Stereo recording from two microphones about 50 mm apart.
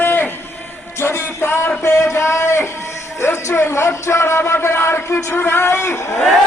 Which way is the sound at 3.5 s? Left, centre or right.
Left.